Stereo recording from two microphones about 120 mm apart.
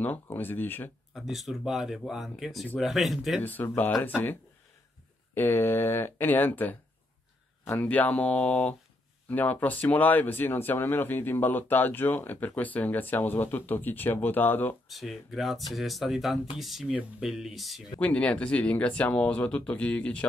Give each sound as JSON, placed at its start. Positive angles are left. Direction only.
{"t": 0.0, "sound": "speech", "side_deg": 15}
{"t": 1.1, "sound": "speech", "side_deg": 0}
{"t": 3.4, "sound": "speech", "side_deg": 15}
{"t": 14.9, "sound": "speech", "side_deg": 0}
{"t": 18.0, "sound": "speech", "side_deg": 10}